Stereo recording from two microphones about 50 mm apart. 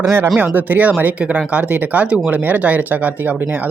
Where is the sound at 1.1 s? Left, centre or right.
Right.